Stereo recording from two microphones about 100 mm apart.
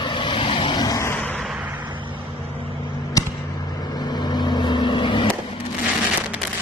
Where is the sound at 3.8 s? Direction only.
45° left (ahead or behind).